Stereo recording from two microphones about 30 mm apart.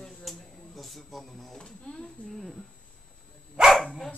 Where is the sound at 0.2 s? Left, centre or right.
Centre.